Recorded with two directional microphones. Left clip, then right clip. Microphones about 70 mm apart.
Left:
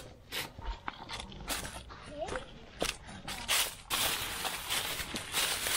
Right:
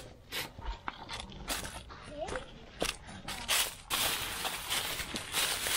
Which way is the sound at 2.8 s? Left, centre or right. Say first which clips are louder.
Even; right.